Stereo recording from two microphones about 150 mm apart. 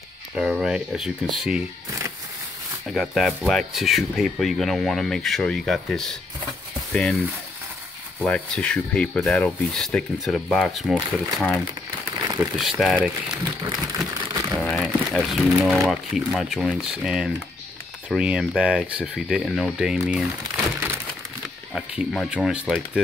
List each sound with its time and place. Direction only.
0.4 s speech: 5° right (ahead or behind)
2.9 s speech: centre (ahead or behind)
12.3 s a sound: 25° right (ahead or behind)
12.5 s speech: centre (ahead or behind)
13.6 s a sound: 25° right (ahead or behind)
14.5 s speech: 5° left (ahead or behind)
21.7 s speech: centre (ahead or behind)